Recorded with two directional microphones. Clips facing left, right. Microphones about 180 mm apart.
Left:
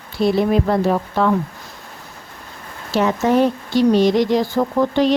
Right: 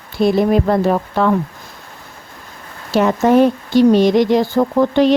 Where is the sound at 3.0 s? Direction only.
50° right (ahead or behind).